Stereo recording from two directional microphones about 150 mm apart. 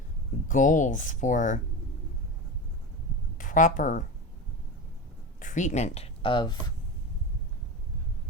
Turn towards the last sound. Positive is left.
turn(degrees=30)  # may be behind; listen again after turning